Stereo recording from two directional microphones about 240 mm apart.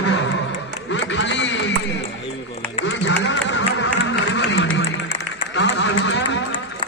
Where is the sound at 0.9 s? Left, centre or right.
Left.